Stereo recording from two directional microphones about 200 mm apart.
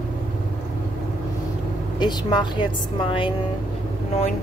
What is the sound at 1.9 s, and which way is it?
A woman's voice, 20° left (ahead or behind).